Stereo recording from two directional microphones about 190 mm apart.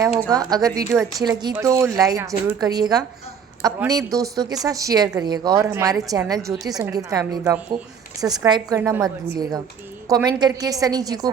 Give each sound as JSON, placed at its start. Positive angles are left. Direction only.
{"t": 0.3, "sound": "a woman's voice", "side_deg": -20}
{"t": 8.8, "sound": "a woman's voice", "side_deg": -5}
{"t": 10.1, "sound": "speech", "side_deg": -20}